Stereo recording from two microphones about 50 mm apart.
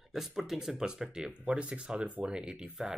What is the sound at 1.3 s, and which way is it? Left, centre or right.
Speech, right.